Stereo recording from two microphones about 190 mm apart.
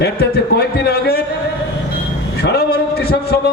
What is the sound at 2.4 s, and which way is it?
A man's voice, 55° left (ahead or behind).